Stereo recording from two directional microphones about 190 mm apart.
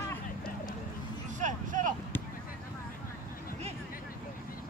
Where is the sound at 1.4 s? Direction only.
45° right (ahead or behind).